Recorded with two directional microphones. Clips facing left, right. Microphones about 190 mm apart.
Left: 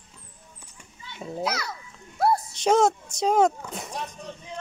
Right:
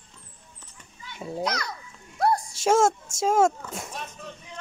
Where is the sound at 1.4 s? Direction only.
5° left (ahead or behind).